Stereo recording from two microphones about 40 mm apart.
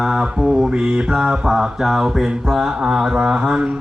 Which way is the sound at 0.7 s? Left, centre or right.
Right.